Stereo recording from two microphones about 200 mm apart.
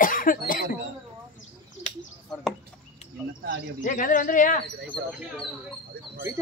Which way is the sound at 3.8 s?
40° left (ahead or behind).